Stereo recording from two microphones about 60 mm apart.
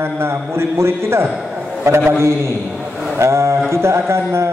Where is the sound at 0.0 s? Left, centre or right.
Right.